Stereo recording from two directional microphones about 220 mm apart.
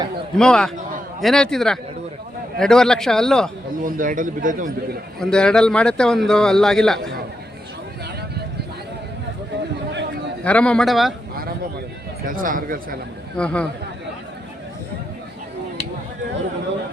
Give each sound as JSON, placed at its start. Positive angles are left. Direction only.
{"t": 0.3, "sound": "a man's voice", "side_deg": 5}
{"t": 3.8, "sound": "a man's voice", "side_deg": -40}
{"t": 5.2, "sound": "a man's voice", "side_deg": 5}
{"t": 9.9, "sound": "a sound", "side_deg": -50}
{"t": 10.4, "sound": "a man's voice", "side_deg": 5}
{"t": 12.2, "sound": "a man's voice", "side_deg": -40}
{"t": 13.3, "sound": "a man's voice", "side_deg": 5}